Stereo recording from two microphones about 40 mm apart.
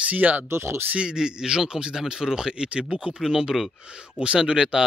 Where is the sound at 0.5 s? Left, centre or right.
Right.